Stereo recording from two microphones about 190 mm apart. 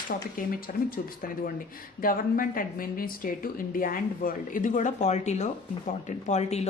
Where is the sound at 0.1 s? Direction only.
50° left (ahead or behind).